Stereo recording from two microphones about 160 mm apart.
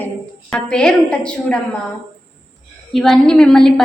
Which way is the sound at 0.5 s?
5° left (ahead or behind).